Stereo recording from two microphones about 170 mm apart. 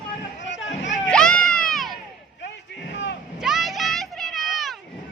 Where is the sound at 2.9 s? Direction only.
90° left.